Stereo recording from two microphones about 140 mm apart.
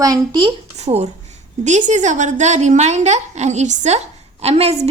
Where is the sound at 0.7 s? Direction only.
50° right (ahead or behind).